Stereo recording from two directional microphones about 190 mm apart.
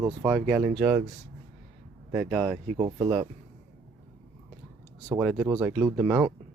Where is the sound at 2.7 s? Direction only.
30° right (ahead or behind).